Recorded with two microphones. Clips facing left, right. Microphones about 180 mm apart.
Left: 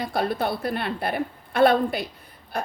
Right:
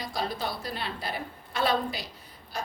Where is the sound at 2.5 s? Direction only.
55° left (ahead or behind).